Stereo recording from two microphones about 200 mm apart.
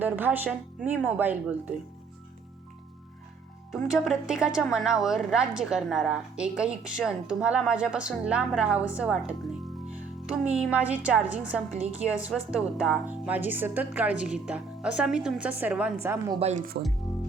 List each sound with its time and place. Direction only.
0.0 s a woman's voice: 10° right (ahead or behind)
3.7 s a woman's voice: centre (ahead or behind)
16.0 s a woman's voice: 15° right (ahead or behind)
16.4 s speech: 35° right (ahead or behind)